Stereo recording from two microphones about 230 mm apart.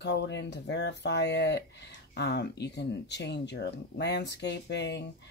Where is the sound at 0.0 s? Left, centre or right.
Left.